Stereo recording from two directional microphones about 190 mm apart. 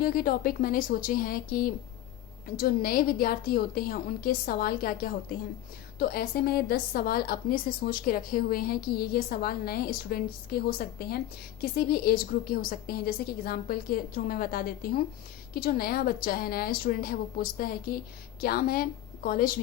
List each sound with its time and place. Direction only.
0.0 s a woman's voice: 50° left (ahead or behind)